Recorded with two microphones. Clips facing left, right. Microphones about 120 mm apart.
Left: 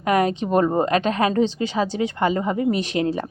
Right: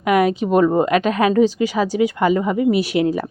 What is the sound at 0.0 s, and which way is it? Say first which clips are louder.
A woman's voice: right 3 dB; 35° left (ahead or behind).